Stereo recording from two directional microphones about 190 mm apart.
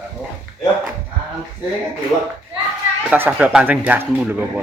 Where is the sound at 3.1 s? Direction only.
5° right (ahead or behind).